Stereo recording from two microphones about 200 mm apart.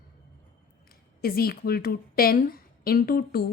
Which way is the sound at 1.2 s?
50° left (ahead or behind).